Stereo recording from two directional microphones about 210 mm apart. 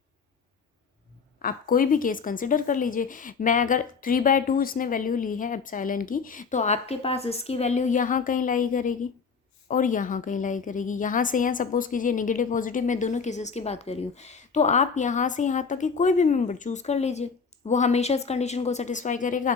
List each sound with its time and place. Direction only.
1.4 s speech: 45° left (ahead or behind)